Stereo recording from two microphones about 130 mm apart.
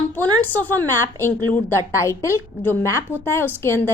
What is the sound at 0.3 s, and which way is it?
A woman's voice, 15° left (ahead or behind).